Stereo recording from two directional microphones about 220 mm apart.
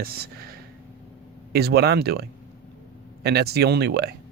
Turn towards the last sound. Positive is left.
turn(degrees=-45)  # may be behind; listen again after turning